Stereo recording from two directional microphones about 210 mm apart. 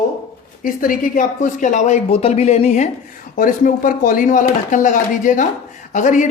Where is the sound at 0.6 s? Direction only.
40° left (ahead or behind).